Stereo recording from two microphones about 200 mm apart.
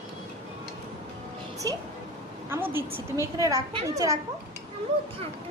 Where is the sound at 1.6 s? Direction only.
20° right (ahead or behind).